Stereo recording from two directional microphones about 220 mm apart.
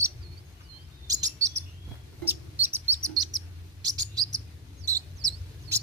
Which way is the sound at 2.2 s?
10° right (ahead or behind).